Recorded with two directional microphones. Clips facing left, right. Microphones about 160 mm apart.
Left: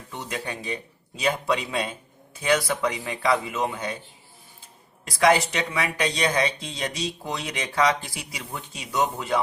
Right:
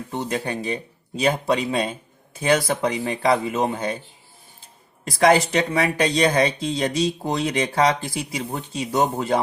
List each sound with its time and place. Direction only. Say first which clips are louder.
0.1 s speech: right 7 dB; 35° right (ahead or behind)
0.4 s speech: right 6 dB; 45° right (ahead or behind)
1.2 s speech: right 4 dB; 35° right (ahead or behind)
5.2 s speech: right 3 dB; 35° right (ahead or behind)